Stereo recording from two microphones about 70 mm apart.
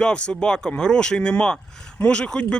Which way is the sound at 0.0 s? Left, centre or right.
Centre.